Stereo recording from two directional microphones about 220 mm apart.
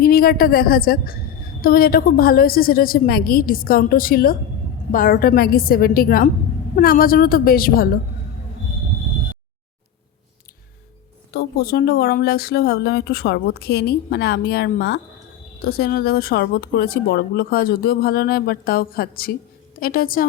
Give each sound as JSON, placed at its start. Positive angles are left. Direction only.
{"t": 0.0, "sound": "a woman's voice", "side_deg": 40}
{"t": 11.3, "sound": "a woman's voice", "side_deg": 45}